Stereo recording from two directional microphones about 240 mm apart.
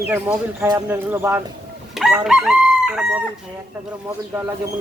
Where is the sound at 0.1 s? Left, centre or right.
Centre.